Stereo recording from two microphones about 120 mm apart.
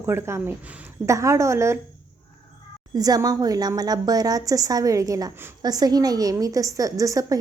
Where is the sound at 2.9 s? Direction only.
30° right (ahead or behind).